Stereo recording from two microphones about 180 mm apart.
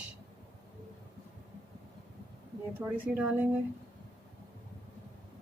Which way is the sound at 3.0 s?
10° right (ahead or behind).